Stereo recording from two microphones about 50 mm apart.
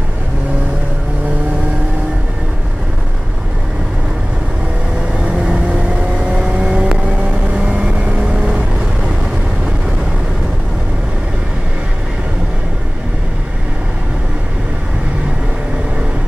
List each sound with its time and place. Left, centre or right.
5.2 s vehicle: right